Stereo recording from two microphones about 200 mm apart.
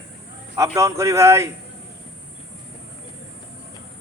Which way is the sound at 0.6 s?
15° right (ahead or behind).